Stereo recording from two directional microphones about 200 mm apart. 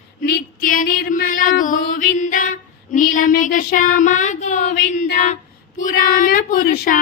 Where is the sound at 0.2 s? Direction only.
45° left (ahead or behind).